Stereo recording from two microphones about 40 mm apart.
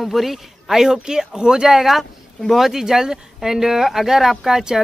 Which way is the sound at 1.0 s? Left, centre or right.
Centre.